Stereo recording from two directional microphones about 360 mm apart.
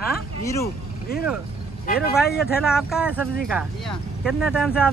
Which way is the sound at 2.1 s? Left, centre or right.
Centre.